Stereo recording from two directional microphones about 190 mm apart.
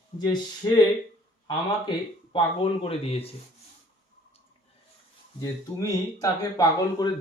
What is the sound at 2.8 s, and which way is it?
Speech, 30° left (ahead or behind).